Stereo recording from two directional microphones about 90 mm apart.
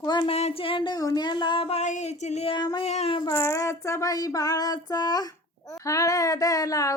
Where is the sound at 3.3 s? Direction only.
30° left (ahead or behind); by 5.3 s 50° left (ahead or behind).